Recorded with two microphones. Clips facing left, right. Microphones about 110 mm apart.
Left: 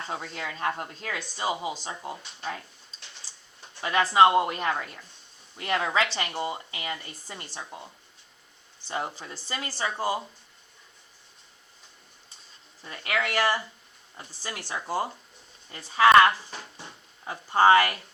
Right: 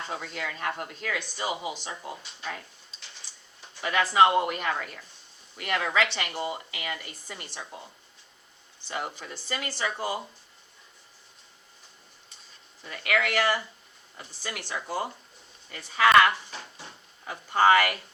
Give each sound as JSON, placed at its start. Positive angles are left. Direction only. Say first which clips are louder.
{"t": 0.1, "sound": "a woman's voice", "louder": "even", "side_deg": 25}
{"t": 3.8, "sound": "a woman's voice", "louder": "left 1 dB", "side_deg": 30}
{"t": 9.1, "sound": "a woman's voice", "louder": "right 1 dB", "side_deg": 30}
{"t": 12.8, "sound": "a woman's voice", "louder": "right 2 dB", "side_deg": 30}